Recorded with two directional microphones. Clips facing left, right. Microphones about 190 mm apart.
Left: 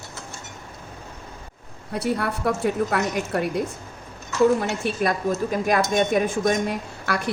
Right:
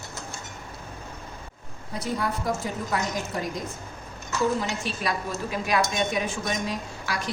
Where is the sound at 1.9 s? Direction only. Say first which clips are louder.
Left 4 dB; 65° left (ahead or behind).